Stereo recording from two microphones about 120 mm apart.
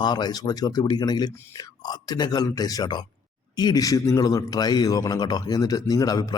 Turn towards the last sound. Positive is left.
turn(degrees=30)  # may be behind; listen again after turning